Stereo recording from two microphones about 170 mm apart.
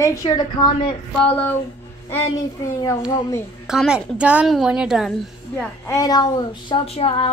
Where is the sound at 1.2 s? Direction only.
10° left (ahead or behind).